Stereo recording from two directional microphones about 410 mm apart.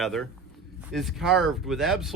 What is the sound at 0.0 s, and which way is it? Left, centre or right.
Speech, centre.